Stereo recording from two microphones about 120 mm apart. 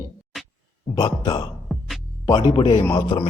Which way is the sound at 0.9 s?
35° left (ahead or behind).